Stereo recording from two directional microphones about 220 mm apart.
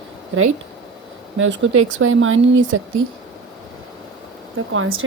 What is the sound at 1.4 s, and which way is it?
Speech, 60° right (ahead or behind).